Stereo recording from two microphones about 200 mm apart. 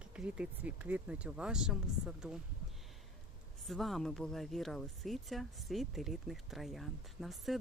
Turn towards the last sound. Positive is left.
turn(degrees=0)  # may be behind; listen again after turning